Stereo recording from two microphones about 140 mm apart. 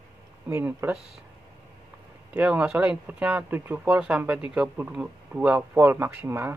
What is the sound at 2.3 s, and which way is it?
Speech, 10° right (ahead or behind).